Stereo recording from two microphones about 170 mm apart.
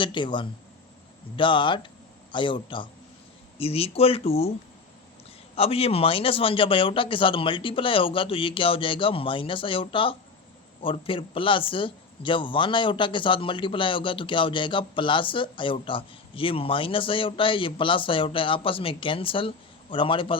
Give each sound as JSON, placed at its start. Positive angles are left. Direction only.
{"t": 0.0, "sound": "a man's voice", "side_deg": 30}
{"t": 5.5, "sound": "a man's voice", "side_deg": 35}